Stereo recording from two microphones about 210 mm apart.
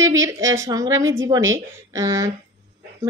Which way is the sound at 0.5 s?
15° right (ahead or behind).